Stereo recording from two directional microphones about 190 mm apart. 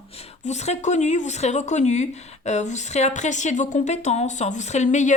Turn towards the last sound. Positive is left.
turn(degrees=40)  # may be behind; listen again after turning